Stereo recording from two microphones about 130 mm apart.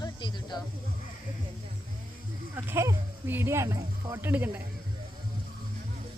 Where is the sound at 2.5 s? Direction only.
20° right (ahead or behind).